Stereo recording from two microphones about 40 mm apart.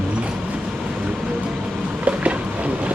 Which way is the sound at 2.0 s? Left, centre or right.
Right.